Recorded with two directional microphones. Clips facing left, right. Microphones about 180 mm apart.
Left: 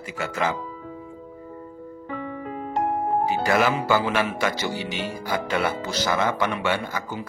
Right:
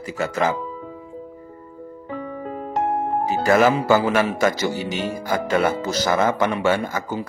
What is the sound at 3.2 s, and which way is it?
Speech, 45° right (ahead or behind).